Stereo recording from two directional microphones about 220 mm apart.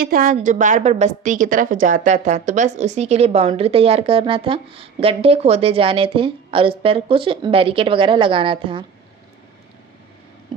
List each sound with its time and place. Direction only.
0.0 s a woman's voice: 40° right (ahead or behind); by 8.8 s 25° right (ahead or behind)